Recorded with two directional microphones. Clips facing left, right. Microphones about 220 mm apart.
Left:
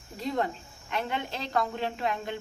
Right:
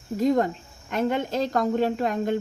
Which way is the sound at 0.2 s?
45° right (ahead or behind).